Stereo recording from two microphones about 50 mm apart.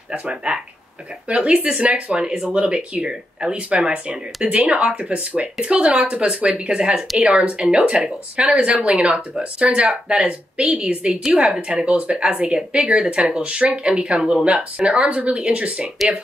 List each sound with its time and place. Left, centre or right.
0.1 s a woman's voice: right